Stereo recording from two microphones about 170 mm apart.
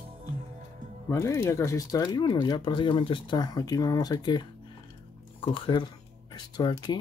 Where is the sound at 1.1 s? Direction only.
15° left (ahead or behind).